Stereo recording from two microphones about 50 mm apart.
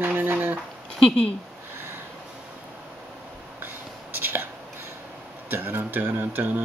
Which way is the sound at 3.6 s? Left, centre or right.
Right.